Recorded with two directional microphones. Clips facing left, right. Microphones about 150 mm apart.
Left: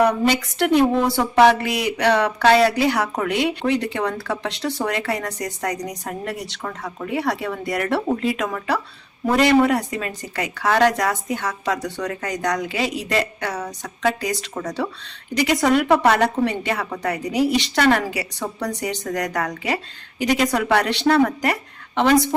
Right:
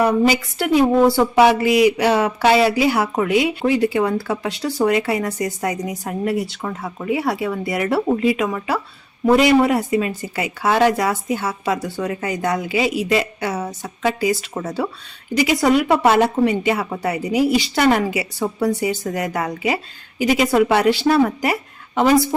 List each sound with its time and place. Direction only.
0.0 s speech: 5° right (ahead or behind)